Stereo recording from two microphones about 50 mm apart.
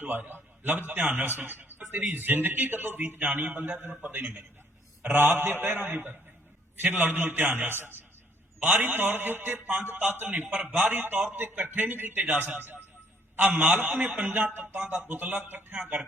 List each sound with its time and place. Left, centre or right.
0.2 s a man's voice: right
3.2 s a man's voice: right
8.6 s a man's voice: right